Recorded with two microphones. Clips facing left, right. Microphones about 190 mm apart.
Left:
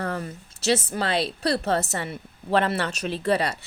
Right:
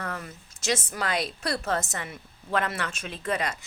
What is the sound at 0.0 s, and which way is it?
A woman's voice, 35° left (ahead or behind).